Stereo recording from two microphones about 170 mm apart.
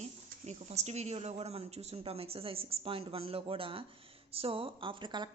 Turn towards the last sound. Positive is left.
turn(degrees=-30)  # may be behind; listen again after turning